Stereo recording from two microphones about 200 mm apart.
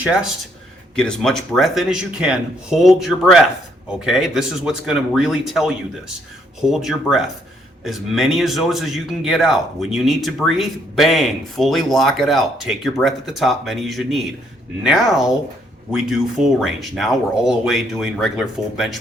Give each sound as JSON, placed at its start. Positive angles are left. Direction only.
{"t": 0.0, "sound": "a man's voice", "side_deg": -5}